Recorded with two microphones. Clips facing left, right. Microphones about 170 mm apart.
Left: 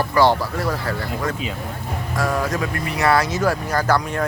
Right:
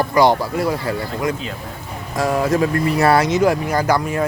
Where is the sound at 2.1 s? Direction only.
25° right (ahead or behind).